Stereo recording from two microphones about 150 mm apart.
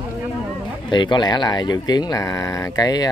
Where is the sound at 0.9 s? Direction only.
30° left (ahead or behind).